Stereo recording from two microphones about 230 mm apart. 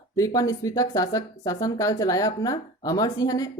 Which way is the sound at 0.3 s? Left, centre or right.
Centre.